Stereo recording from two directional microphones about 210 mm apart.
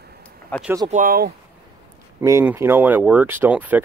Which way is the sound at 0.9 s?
40° right (ahead or behind).